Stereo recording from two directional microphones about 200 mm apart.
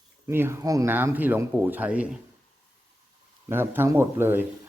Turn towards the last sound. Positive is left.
turn(degrees=-10)  # may be behind; listen again after turning